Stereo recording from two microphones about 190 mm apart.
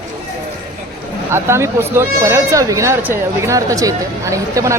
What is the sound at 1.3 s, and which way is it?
Speech, 15° right (ahead or behind).